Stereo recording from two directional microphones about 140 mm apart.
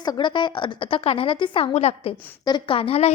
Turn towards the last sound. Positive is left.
turn(degrees=45)  # may be behind; listen again after turning